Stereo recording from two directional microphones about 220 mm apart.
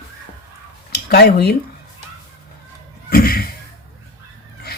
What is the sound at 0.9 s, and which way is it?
Speech, 45° left (ahead or behind).